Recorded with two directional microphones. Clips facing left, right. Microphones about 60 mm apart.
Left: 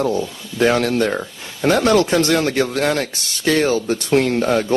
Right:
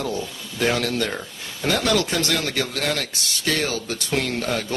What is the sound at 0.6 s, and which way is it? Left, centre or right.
Speech, left.